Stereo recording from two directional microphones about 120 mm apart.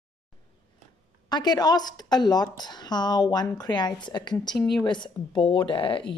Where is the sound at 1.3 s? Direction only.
35° left (ahead or behind).